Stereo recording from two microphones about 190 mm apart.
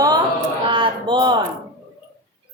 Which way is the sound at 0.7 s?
25° right (ahead or behind).